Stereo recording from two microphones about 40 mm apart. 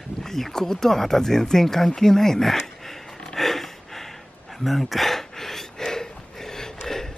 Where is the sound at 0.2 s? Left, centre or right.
Centre.